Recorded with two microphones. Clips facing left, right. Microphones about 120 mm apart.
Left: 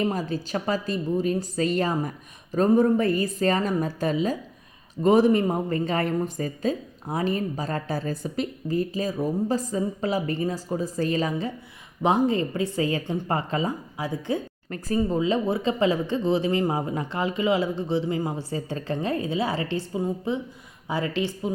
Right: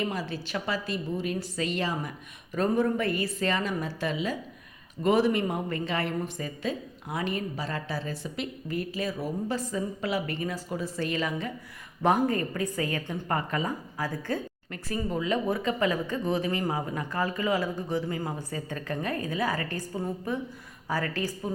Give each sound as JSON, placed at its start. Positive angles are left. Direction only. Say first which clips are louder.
{"t": 0.0, "sound": "a woman's voice", "louder": "left 5 dB", "side_deg": 40}
{"t": 14.7, "sound": "speech", "louder": "left 7 dB", "side_deg": 35}
{"t": 20.8, "sound": "speech", "louder": "left 4 dB", "side_deg": 20}